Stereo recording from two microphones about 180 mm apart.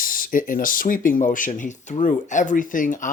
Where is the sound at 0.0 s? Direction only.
50° left (ahead or behind).